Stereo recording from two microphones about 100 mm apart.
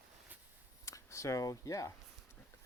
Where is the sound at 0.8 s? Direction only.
30° left (ahead or behind).